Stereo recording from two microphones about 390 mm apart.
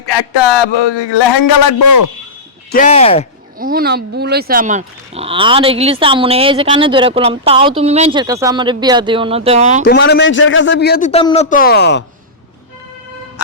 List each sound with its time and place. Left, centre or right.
0.0 s a man's voice: left
2.7 s speech: centre
3.6 s speech: right
9.8 s a man's voice: left